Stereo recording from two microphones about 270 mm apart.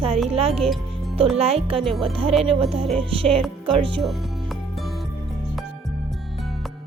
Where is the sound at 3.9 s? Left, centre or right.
Centre.